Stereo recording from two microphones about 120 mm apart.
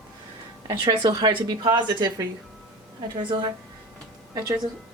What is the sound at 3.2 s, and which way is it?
A woman's voice, 40° right (ahead or behind).